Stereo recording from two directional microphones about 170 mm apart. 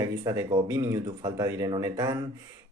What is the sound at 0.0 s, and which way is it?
Speech, 20° right (ahead or behind).